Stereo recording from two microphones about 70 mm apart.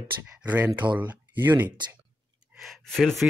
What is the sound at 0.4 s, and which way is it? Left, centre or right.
Speech, right.